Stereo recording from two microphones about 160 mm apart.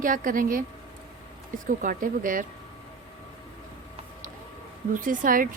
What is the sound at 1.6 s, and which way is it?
Speech, 55° right (ahead or behind).